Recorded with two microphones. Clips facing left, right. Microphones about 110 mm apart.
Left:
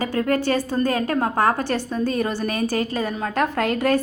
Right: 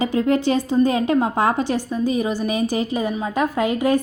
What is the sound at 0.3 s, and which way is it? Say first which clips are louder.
Speech: right 1 dB; 20° right (ahead or behind).